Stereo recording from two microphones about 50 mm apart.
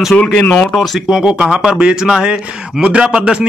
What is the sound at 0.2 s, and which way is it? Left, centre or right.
Speech, left.